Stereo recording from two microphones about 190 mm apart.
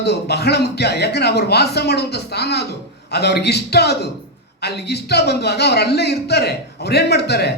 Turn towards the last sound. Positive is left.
turn(degrees=60)  # may be behind; listen again after turning